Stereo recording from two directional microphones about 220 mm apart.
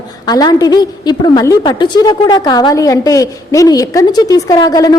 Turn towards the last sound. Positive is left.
turn(degrees=15)  # may be behind; listen again after turning